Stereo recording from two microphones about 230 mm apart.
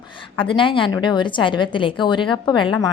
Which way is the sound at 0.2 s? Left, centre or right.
Left.